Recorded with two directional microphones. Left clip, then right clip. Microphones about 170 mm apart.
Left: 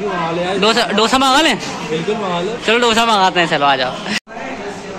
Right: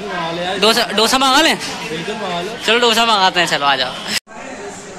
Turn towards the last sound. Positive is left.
turn(degrees=10)  # may be behind; listen again after turning